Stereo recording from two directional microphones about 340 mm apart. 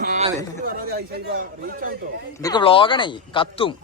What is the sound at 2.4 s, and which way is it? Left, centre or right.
Speech, centre.